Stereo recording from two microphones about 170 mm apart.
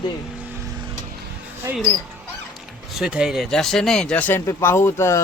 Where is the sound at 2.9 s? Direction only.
5° right (ahead or behind).